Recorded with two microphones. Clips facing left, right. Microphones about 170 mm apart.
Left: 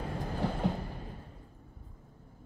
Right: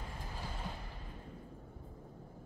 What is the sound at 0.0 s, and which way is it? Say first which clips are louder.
Train: left 12 dB; 65° left (ahead or behind).